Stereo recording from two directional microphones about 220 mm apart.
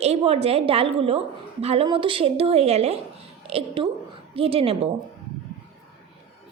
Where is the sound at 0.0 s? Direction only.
30° right (ahead or behind).